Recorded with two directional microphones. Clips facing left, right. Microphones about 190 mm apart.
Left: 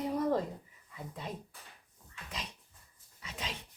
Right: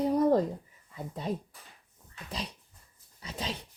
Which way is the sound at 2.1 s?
35° right (ahead or behind).